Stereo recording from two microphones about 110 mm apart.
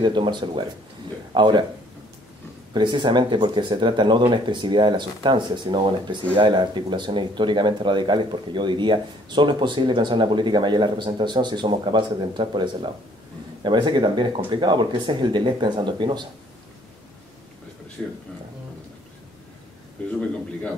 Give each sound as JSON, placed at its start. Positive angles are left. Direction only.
{"t": 0.0, "sound": "speech", "side_deg": -45}
{"t": 2.7, "sound": "speech", "side_deg": -45}
{"t": 13.7, "sound": "speech", "side_deg": -45}
{"t": 20.0, "sound": "a man's voice", "side_deg": 10}